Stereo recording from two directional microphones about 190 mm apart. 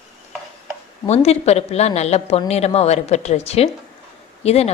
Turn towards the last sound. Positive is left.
turn(degrees=35)  # may be behind; listen again after turning